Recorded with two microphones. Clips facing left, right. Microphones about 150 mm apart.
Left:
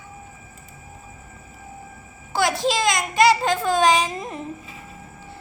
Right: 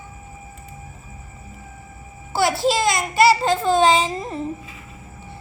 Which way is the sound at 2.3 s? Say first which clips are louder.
Right 2 dB; 10° right (ahead or behind).